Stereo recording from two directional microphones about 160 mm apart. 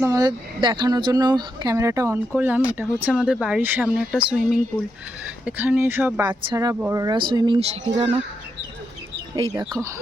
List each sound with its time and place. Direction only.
0.0 s speech: 20° right (ahead or behind)
6.2 s speech: 25° right (ahead or behind)
6.7 s speech: 10° right (ahead or behind)
7.0 s speech: 30° right (ahead or behind)